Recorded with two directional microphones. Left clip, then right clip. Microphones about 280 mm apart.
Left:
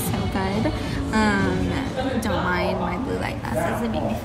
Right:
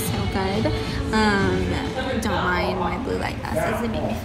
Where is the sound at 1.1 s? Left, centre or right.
Centre.